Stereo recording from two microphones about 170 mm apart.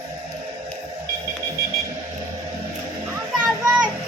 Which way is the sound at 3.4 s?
Centre (ahead or behind).